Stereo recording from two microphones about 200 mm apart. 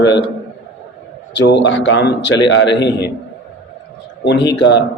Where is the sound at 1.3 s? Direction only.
60° left (ahead or behind).